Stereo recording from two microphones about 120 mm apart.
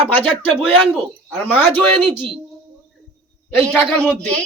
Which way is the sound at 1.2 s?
15° left (ahead or behind).